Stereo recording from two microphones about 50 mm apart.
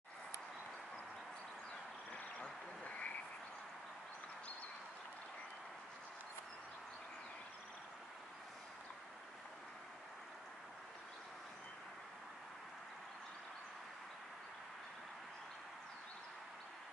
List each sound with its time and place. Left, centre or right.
2.8 s frog: left